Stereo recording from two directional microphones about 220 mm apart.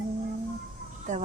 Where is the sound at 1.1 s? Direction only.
35° right (ahead or behind).